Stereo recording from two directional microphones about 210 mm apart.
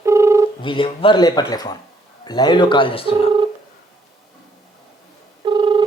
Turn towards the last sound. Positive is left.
turn(degrees=-20)  # may be behind; listen again after turning